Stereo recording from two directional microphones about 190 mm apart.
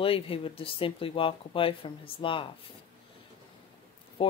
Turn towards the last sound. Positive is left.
turn(degrees=30)  # may be behind; listen again after turning